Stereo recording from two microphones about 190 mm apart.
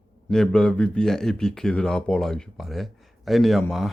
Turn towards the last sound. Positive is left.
turn(degrees=0)  # may be behind; listen again after turning